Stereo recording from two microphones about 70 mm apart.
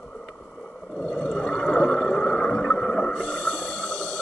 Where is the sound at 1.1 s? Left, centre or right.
Centre.